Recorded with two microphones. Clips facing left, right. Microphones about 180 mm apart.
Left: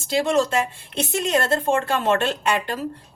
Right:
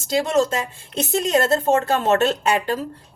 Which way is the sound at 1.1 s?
40° right (ahead or behind).